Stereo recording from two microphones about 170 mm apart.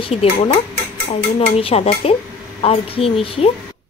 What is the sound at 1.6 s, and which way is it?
Speech, 35° left (ahead or behind).